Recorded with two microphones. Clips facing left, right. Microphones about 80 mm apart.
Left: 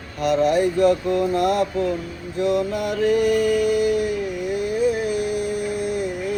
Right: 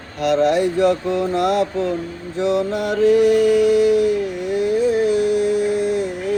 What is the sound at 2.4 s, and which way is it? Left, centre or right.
Mantra, right.